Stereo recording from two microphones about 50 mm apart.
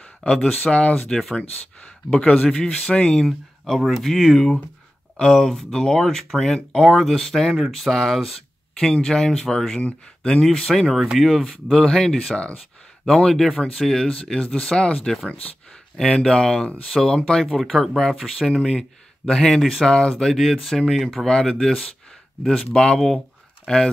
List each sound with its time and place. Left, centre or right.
0.2 s speech: centre
1.0 s speech: centre
2.0 s speech: centre
2.3 s speech: left
3.3 s speech: centre
7.5 s speech: centre
7.9 s speech: centre
10.7 s speech: centre
17.6 s speech: centre
22.9 s speech: centre
23.7 s speech: centre